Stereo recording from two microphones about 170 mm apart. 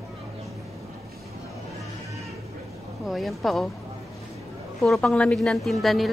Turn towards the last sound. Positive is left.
turn(degrees=0)  # may be behind; listen again after turning